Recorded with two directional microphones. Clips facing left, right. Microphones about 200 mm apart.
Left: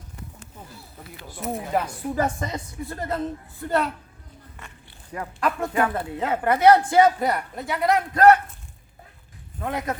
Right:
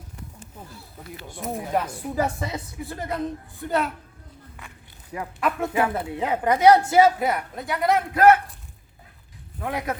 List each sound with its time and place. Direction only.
1.3 s a woman's voice: centre (ahead or behind)
2.1 s a woman's voice: 10° right (ahead or behind)
5.1 s a woman's voice: 5° right (ahead or behind)
9.6 s a woman's voice: 5° right (ahead or behind)